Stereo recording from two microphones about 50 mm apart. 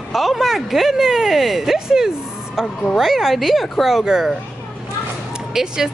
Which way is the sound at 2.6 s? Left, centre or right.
Centre.